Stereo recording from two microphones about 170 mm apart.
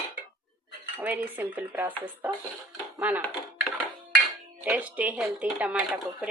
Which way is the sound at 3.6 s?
5° right (ahead or behind).